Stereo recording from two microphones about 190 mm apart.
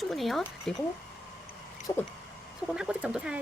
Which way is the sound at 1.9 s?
30° left (ahead or behind).